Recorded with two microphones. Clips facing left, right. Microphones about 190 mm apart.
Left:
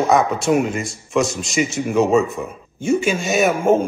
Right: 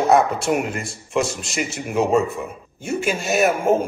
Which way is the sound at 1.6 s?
10° right (ahead or behind).